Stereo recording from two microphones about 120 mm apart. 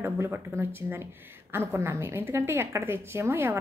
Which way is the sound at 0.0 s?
20° right (ahead or behind).